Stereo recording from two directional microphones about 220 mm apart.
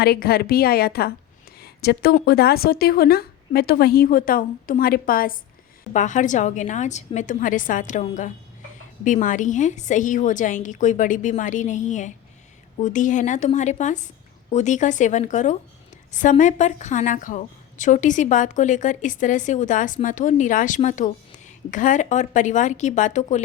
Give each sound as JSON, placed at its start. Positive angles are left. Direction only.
{"t": 0.0, "sound": "a woman's voice", "side_deg": 45}